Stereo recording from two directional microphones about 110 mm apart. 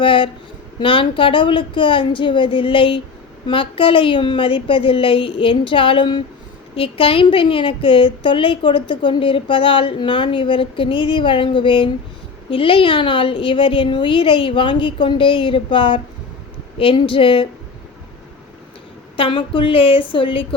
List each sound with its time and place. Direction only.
0.0 s a woman's voice: 50° left (ahead or behind)
6.7 s a woman's voice: 55° left (ahead or behind)
19.1 s a woman's voice: 55° left (ahead or behind)